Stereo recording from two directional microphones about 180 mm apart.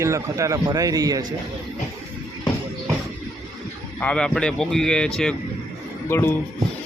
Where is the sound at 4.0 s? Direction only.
5° left (ahead or behind).